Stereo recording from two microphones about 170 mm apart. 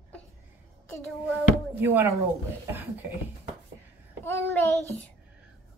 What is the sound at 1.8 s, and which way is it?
Speech, 15° right (ahead or behind).